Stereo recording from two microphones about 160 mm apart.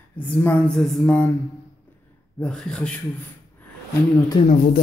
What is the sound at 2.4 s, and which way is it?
Speech, 5° left (ahead or behind).